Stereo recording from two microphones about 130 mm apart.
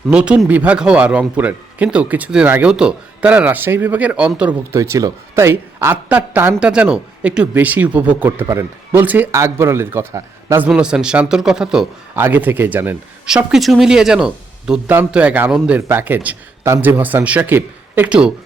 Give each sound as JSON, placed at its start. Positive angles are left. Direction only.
{"t": 0.1, "sound": "speech", "side_deg": -10}
{"t": 4.7, "sound": "speech", "side_deg": -25}
{"t": 10.7, "sound": "speech", "side_deg": -5}